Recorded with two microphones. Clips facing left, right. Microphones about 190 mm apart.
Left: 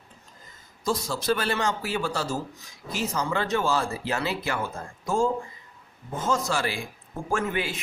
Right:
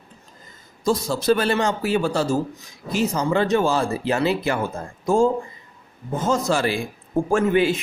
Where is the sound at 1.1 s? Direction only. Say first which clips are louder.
Right 8 dB; 25° right (ahead or behind).